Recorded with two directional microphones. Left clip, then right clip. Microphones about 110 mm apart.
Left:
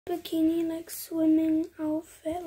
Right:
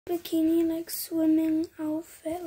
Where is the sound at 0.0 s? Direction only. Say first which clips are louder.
Right 1 dB; 15° right (ahead or behind).